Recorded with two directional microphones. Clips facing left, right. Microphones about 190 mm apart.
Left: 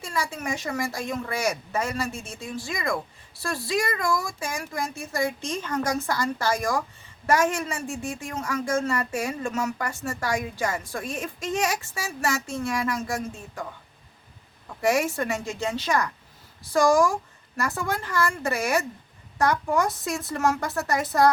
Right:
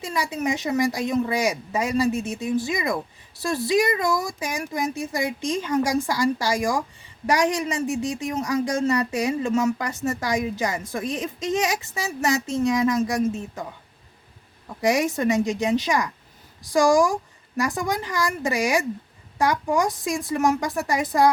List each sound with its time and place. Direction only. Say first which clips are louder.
0.0 s a woman's voice: right 4 dB; 20° right (ahead or behind)
14.8 s a woman's voice: right 2 dB; 15° right (ahead or behind)